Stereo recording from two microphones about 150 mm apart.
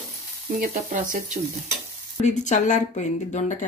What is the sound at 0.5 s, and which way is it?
Frying, 60° right (ahead or behind).